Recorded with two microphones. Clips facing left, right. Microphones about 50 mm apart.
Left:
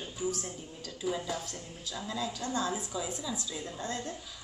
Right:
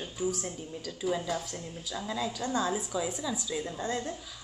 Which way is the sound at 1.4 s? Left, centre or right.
Right.